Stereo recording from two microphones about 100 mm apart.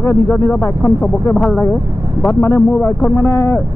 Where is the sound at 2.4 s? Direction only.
25° left (ahead or behind).